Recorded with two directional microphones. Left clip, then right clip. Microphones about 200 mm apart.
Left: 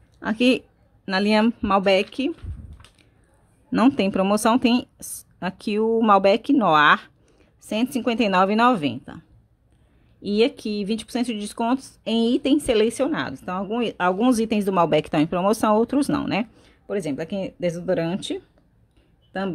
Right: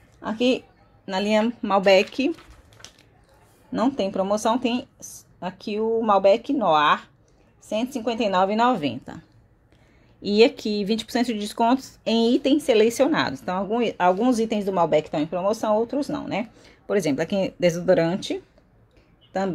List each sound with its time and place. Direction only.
0.2 s speech: 25° left (ahead or behind); by 2.3 s 5° left (ahead or behind)
3.7 s speech: 30° left (ahead or behind); by 9.2 s 10° left (ahead or behind)
10.2 s speech: 5° left (ahead or behind); by 16.4 s 25° left (ahead or behind)
16.6 s speech: centre (ahead or behind)